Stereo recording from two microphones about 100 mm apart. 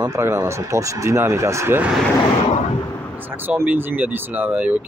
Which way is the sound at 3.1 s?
20° right (ahead or behind).